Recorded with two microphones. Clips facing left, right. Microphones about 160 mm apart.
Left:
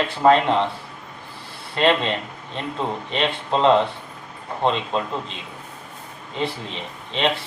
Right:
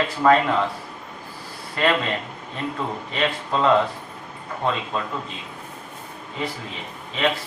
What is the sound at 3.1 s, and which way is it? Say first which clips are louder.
Speech: left 1 dB; 25° left (ahead or behind).